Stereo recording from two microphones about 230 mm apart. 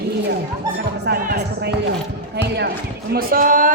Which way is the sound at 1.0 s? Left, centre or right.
Right.